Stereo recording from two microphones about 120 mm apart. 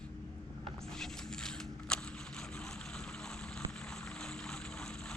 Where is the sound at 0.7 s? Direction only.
5° left (ahead or behind).